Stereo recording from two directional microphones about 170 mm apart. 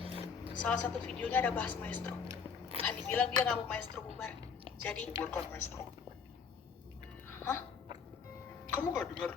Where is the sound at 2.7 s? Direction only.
35° right (ahead or behind).